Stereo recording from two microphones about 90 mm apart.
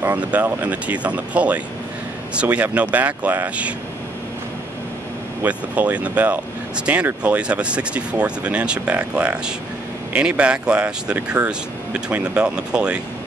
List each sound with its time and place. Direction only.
0.0 s speech: 15° right (ahead or behind)
5.4 s speech: 15° right (ahead or behind)